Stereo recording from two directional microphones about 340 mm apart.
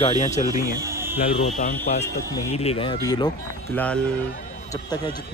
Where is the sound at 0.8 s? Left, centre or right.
Centre.